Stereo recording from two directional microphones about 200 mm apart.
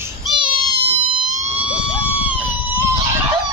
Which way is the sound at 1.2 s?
35° right (ahead or behind).